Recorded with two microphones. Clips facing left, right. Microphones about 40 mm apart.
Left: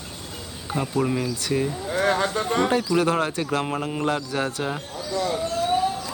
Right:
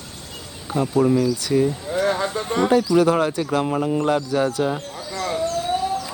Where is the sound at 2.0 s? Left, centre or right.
Left.